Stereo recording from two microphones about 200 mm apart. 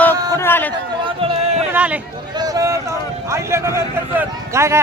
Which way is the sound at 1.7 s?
5° right (ahead or behind).